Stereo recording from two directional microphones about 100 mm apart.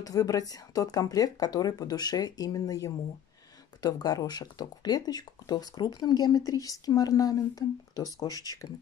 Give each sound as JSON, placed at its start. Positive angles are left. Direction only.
{"t": 0.0, "sound": "speech", "side_deg": 35}